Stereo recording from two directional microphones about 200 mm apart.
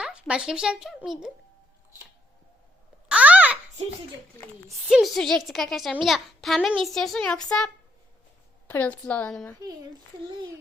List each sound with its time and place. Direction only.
0.0 s speech: 5° right (ahead or behind)
3.1 s a sound: 5° right (ahead or behind)
4.9 s a woman's voice: centre (ahead or behind)